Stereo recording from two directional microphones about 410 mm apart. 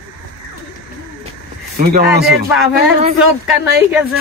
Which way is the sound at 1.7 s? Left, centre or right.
Right.